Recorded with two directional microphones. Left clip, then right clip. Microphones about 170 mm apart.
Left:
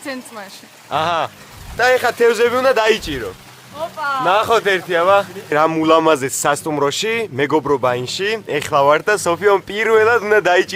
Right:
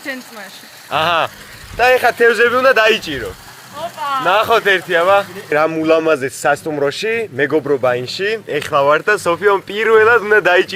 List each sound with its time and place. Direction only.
0.0 s speech: 15° left (ahead or behind)
0.9 s a man's voice: centre (ahead or behind)